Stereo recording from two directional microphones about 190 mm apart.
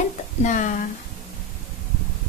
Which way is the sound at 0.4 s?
40° left (ahead or behind).